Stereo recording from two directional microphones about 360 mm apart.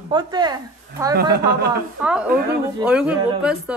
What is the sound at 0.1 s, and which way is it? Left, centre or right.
A woman's voice, centre.